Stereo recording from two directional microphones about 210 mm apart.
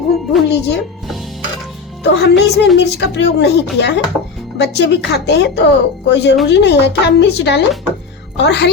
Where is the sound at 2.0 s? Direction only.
55° left (ahead or behind).